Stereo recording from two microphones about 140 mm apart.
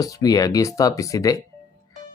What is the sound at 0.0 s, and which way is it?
Speech, 25° left (ahead or behind).